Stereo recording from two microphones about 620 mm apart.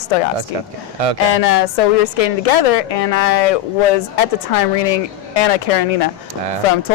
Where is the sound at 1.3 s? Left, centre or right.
Left.